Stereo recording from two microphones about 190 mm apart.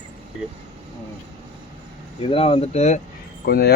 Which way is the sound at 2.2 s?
30° left (ahead or behind).